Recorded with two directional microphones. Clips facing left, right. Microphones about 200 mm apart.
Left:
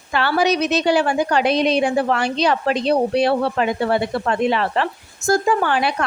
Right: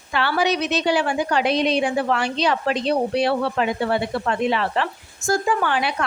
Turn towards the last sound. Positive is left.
turn(degrees=40)  # may be behind; listen again after turning